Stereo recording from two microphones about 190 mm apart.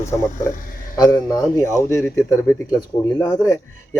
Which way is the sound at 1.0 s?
20° left (ahead or behind).